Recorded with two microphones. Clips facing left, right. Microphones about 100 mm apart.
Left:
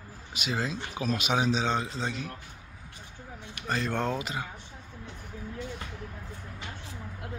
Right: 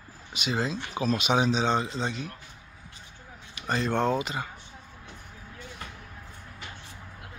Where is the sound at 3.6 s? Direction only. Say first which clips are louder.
Right 2 dB; 60° left (ahead or behind).